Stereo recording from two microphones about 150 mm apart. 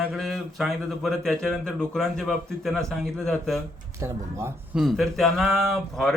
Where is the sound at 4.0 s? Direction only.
15° right (ahead or behind).